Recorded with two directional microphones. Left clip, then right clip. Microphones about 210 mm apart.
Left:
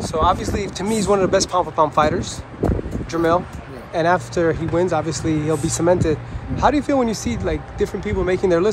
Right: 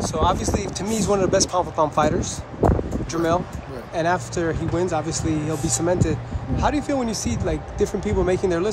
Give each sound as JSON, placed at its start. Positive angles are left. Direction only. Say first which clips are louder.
{"t": 0.0, "sound": "speech", "louder": "left 3 dB", "side_deg": -15}